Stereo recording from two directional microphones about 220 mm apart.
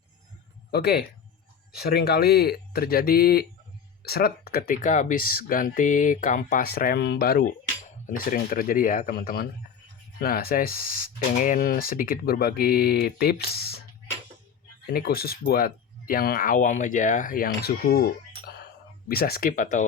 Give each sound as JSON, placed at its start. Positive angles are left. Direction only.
{"t": 0.7, "sound": "speech", "side_deg": 45}
{"t": 14.8, "sound": "speech", "side_deg": 45}